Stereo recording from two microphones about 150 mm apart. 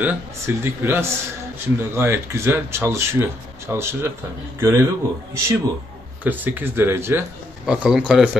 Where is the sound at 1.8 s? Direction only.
15° right (ahead or behind).